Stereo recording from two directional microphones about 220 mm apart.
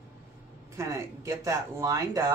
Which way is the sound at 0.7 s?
15° right (ahead or behind).